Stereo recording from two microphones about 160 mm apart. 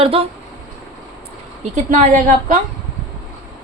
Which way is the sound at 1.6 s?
50° right (ahead or behind).